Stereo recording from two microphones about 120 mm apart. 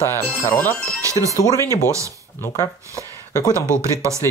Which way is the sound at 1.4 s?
30° left (ahead or behind).